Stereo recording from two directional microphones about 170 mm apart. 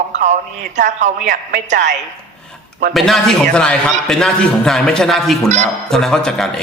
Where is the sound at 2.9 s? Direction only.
Centre (ahead or behind).